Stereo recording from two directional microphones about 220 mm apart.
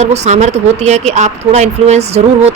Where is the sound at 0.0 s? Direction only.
30° right (ahead or behind).